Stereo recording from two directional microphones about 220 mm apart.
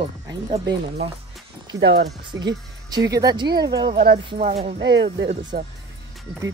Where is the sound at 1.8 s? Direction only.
50° right (ahead or behind).